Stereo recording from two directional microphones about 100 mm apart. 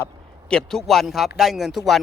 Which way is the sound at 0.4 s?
5° left (ahead or behind).